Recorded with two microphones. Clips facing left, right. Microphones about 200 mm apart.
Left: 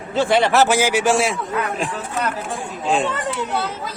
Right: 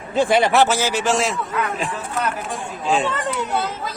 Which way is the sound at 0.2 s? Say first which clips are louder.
Even; 15° right (ahead or behind).